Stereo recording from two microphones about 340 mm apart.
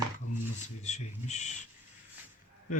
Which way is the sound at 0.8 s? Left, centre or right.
Centre.